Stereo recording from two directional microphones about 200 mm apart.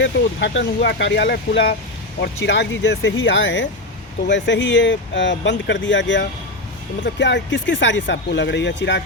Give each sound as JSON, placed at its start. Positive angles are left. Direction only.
{"t": 0.0, "sound": "speech", "side_deg": 65}